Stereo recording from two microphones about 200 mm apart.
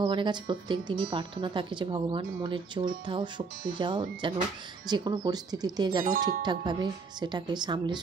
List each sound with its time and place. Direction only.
0.0 s speech: 25° right (ahead or behind)